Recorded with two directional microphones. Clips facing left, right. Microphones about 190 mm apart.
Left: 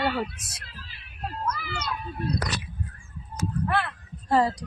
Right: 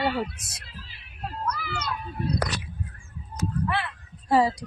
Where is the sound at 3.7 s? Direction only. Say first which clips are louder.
Left 2 dB; 50° left (ahead or behind).